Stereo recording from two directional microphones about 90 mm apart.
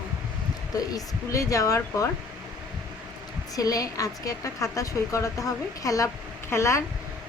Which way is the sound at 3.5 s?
40° left (ahead or behind).